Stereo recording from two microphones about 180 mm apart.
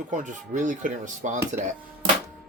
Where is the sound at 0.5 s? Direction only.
45° right (ahead or behind).